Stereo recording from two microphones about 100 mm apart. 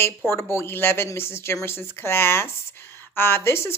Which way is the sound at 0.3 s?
25° left (ahead or behind).